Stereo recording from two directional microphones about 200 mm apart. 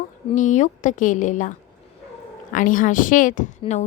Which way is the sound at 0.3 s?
40° left (ahead or behind).